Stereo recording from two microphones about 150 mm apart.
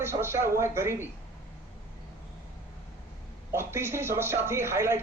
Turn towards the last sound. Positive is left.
turn(degrees=-15)  # may be behind; listen again after turning